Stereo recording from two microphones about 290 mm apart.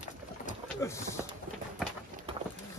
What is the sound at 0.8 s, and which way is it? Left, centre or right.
Speech, centre.